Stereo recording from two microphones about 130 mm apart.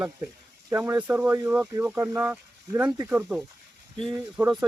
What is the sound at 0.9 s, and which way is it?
Speech, 15° right (ahead or behind).